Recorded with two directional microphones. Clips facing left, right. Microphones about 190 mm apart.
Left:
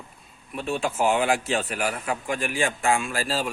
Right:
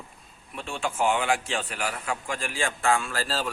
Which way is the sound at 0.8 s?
25° left (ahead or behind).